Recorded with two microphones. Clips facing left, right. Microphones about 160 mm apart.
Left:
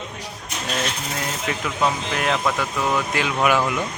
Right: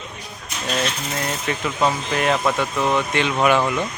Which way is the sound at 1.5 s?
Centre (ahead or behind).